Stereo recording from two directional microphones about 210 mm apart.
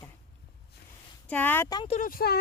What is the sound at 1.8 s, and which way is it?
Speech, 30° left (ahead or behind).